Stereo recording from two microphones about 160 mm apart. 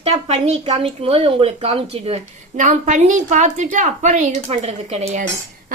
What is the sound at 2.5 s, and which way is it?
A woman's voice, 50° right (ahead or behind).